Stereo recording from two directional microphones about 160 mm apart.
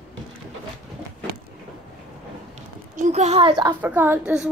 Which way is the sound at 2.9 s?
50° right (ahead or behind).